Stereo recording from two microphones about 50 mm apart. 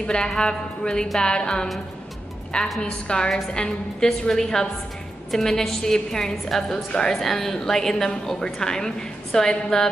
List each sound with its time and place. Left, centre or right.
0.0 s a woman's voice: centre
2.8 s a woman's voice: centre